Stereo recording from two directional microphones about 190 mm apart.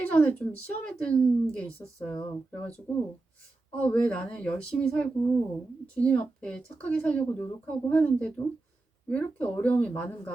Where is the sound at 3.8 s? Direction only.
5° left (ahead or behind).